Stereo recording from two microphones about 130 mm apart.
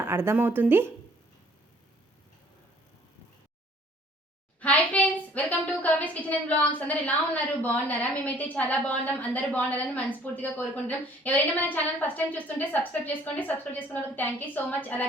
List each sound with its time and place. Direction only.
0.0 s a woman's voice: 20° right (ahead or behind)
4.6 s a woman's voice: 10° left (ahead or behind)